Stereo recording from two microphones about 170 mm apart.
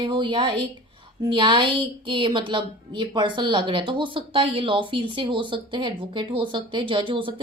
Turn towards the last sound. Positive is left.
turn(degrees=-30)  # may be behind; listen again after turning